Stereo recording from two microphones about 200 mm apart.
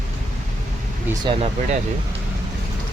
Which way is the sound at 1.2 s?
30° right (ahead or behind).